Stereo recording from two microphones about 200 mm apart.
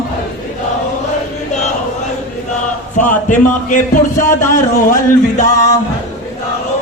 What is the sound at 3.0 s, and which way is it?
Speech, 40° left (ahead or behind).